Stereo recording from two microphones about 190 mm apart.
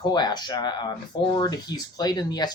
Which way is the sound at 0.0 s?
20° left (ahead or behind).